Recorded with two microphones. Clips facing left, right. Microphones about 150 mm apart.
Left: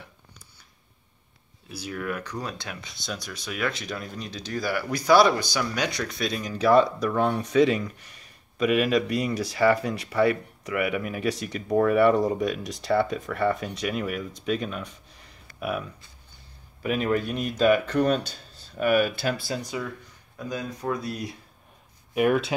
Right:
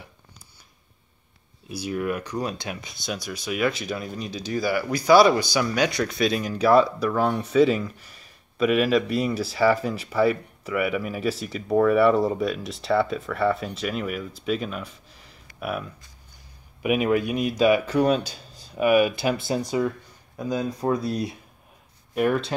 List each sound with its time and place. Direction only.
1.7 s speech: 15° right (ahead or behind)
16.8 s a man's voice: 10° right (ahead or behind); by 21.4 s 25° right (ahead or behind)
22.1 s speech: 5° left (ahead or behind)